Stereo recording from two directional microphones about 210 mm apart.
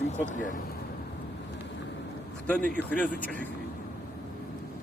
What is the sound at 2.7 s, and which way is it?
Speech, 5° left (ahead or behind).